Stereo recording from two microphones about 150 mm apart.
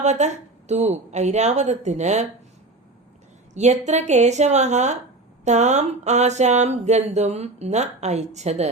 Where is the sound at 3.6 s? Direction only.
50° right (ahead or behind).